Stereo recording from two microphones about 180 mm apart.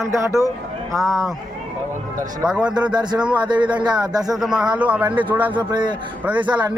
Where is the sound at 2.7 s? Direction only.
25° right (ahead or behind).